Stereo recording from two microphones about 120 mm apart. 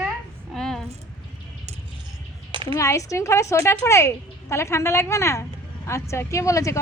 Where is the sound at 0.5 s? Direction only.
5° left (ahead or behind).